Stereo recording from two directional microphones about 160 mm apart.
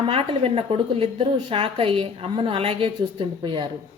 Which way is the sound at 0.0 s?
35° right (ahead or behind).